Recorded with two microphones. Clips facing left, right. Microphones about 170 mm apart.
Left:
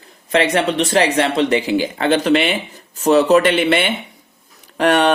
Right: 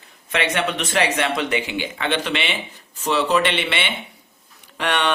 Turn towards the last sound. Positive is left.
turn(degrees=40)  # may be behind; listen again after turning